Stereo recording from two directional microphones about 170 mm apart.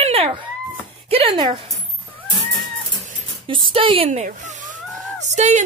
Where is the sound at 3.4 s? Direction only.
30° right (ahead or behind).